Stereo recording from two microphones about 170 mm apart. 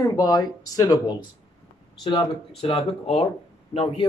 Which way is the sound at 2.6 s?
35° left (ahead or behind).